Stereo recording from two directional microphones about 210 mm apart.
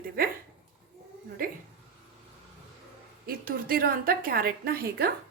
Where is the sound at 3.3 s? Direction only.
45° right (ahead or behind).